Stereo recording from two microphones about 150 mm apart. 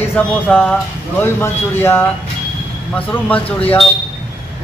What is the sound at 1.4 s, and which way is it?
Speech, 15° left (ahead or behind).